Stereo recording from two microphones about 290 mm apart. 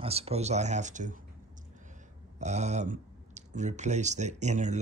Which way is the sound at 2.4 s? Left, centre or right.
Right.